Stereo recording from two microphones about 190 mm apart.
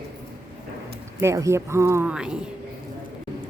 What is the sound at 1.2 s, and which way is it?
Speech, 15° right (ahead or behind).